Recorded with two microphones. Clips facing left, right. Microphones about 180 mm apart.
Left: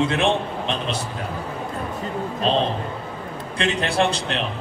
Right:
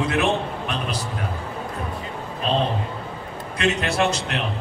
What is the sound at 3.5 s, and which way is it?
Speech, 30° left (ahead or behind).